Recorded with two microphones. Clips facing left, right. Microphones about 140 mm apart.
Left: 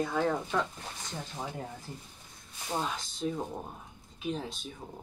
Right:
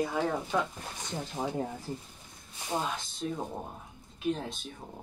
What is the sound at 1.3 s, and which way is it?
Speech, 30° right (ahead or behind).